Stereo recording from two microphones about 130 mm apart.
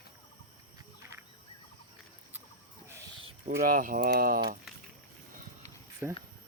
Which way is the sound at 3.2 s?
45° right (ahead or behind).